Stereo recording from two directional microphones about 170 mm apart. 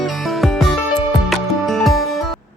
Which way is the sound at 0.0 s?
Centre (ahead or behind).